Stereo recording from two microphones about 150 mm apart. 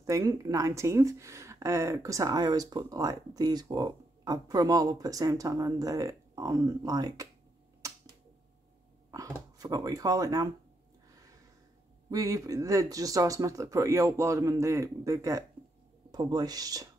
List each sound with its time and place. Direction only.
0.0 s speech: 25° right (ahead or behind)
7.8 s finger snapping: 20° right (ahead or behind)
9.1 s speech: 25° right (ahead or behind)
11.1 s a sound: 20° right (ahead or behind)
12.1 s speech: 25° right (ahead or behind)